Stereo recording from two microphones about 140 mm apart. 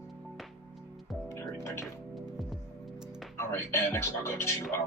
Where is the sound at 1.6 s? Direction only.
20° left (ahead or behind).